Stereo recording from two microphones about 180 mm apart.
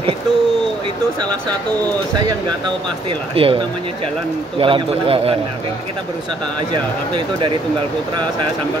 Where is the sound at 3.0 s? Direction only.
30° right (ahead or behind).